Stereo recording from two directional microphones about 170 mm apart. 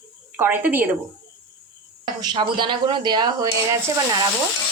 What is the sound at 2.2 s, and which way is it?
Speech, 25° right (ahead or behind).